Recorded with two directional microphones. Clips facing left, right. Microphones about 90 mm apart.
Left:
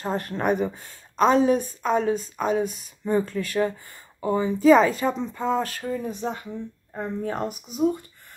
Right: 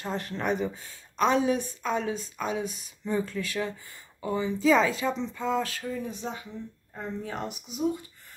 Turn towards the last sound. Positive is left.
turn(degrees=45)  # may be behind; listen again after turning